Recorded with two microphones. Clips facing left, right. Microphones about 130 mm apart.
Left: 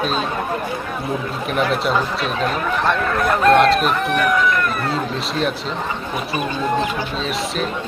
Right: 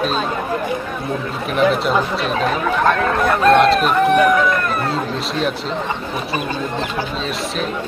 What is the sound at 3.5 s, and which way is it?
Speech, centre (ahead or behind).